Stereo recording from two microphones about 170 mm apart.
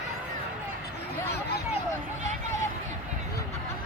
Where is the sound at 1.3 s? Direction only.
75° left (ahead or behind).